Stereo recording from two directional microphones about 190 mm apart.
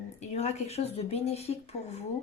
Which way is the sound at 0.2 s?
35° left (ahead or behind).